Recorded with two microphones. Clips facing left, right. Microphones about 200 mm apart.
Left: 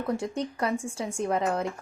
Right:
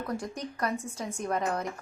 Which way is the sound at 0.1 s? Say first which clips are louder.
Left 5 dB; 25° left (ahead or behind).